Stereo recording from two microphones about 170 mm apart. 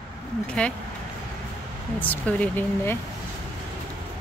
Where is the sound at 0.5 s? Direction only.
5° left (ahead or behind).